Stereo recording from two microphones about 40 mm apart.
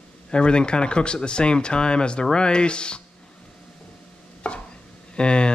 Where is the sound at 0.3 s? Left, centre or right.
Left.